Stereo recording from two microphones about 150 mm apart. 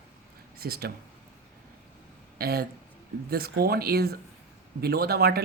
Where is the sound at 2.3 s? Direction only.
90° right.